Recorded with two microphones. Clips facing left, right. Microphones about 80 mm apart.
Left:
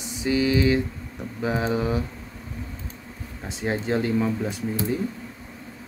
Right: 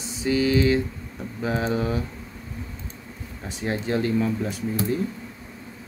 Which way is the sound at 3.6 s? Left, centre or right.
Left.